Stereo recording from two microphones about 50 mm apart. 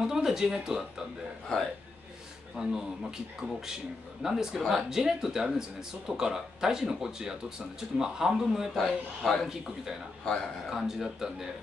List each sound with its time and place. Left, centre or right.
0.0 s speech: centre
2.5 s speech: centre
4.2 s speech: centre
8.7 s a man's voice: centre
10.7 s speech: centre